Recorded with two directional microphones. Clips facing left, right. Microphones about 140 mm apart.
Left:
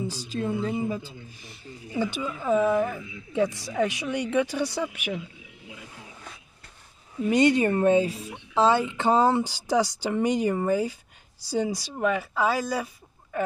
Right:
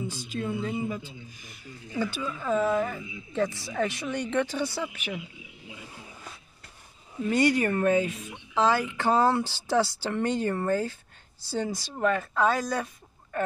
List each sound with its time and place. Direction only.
0.1 s speech: 35° left (ahead or behind)
2.0 s a woman's voice: 15° left (ahead or behind)
3.0 s speech: 10° right (ahead or behind)
3.3 s a woman's voice: 10° left (ahead or behind)
5.4 s wild animals: centre (ahead or behind)
7.2 s a woman's voice: 20° left (ahead or behind)